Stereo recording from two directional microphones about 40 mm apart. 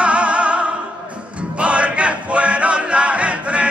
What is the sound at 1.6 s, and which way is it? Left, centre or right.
Chant, right.